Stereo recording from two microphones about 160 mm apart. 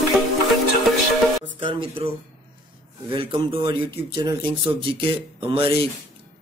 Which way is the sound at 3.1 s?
30° right (ahead or behind).